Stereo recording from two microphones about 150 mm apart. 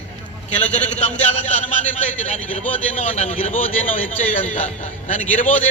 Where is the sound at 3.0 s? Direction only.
50° left (ahead or behind).